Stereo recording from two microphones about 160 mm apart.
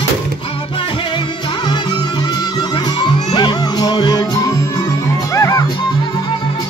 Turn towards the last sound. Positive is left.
turn(degrees=20)  # may be behind; listen again after turning